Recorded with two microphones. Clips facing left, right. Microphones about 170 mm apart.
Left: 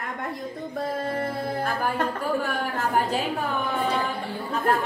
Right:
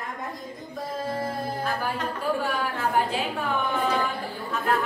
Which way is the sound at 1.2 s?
50° left (ahead or behind).